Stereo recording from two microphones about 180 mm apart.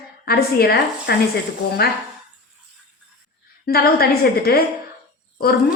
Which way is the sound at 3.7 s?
60° left (ahead or behind).